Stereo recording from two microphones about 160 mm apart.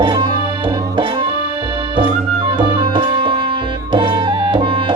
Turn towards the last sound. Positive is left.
turn(degrees=-30)  # may be behind; listen again after turning